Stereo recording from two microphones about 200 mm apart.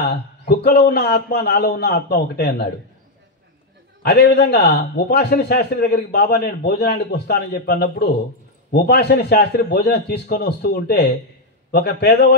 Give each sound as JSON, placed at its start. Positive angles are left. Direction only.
{"t": 0.0, "sound": "a man's voice", "side_deg": 55}
{"t": 4.0, "sound": "a man's voice", "side_deg": 55}